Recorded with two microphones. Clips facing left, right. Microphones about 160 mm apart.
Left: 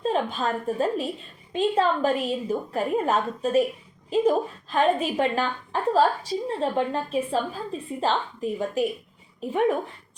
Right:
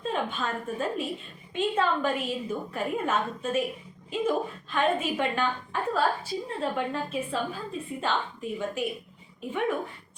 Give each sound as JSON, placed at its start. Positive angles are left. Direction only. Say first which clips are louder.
{"t": 0.0, "sound": "a woman's voice", "louder": "left 5 dB", "side_deg": 35}